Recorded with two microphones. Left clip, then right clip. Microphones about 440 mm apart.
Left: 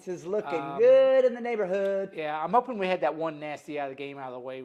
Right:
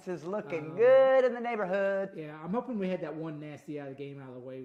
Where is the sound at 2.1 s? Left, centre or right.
Left.